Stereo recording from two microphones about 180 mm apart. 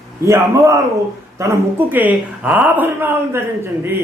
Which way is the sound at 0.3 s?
15° right (ahead or behind).